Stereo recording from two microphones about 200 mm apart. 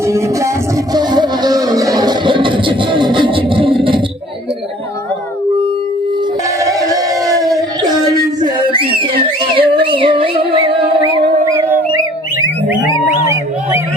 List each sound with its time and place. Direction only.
0.9 s music: 20° right (ahead or behind)
6.7 s a sound: 15° right (ahead or behind)
9.6 s music: 25° right (ahead or behind)
11.4 s music: 10° right (ahead or behind)